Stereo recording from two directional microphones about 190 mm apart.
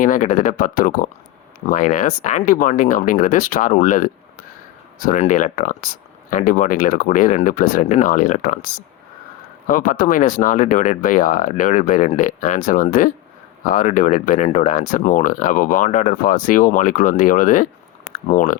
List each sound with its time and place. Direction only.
0.0 s speech: 45° left (ahead or behind)